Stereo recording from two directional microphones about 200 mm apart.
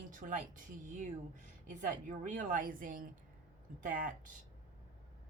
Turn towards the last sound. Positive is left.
turn(degrees=-40)  # may be behind; listen again after turning